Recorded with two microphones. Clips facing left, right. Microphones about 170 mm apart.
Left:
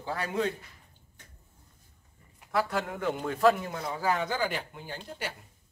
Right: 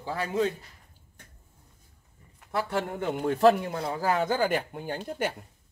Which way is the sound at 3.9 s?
45° right (ahead or behind).